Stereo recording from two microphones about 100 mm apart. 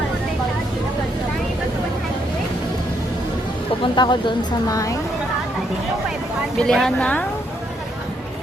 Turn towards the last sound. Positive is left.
turn(degrees=5)  # may be behind; listen again after turning